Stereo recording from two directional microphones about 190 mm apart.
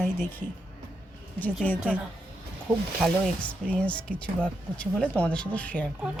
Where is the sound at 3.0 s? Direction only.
Centre (ahead or behind).